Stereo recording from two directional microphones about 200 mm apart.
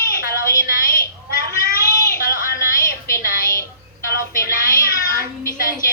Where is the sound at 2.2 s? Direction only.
45° left (ahead or behind).